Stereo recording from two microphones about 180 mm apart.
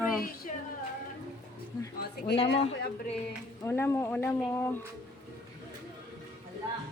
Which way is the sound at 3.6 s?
15° left (ahead or behind).